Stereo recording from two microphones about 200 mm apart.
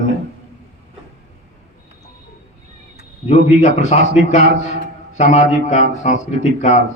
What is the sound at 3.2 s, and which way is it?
A man's voice, 35° left (ahead or behind).